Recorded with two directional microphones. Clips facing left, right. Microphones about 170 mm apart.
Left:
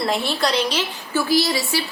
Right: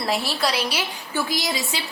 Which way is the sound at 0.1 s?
5° right (ahead or behind).